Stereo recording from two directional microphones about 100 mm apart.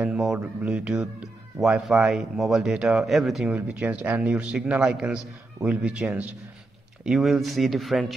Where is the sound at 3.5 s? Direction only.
15° right (ahead or behind).